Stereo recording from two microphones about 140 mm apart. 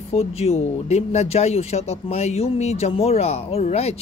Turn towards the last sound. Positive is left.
turn(degrees=50)  # may be behind; listen again after turning